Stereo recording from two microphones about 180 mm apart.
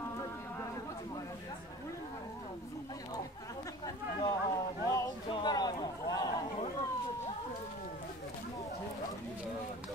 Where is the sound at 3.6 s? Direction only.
20° left (ahead or behind).